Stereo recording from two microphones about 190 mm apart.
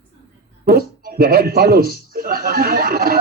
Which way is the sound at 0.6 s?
50° right (ahead or behind).